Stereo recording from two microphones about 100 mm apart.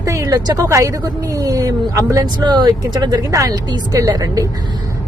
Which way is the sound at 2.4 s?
45° right (ahead or behind).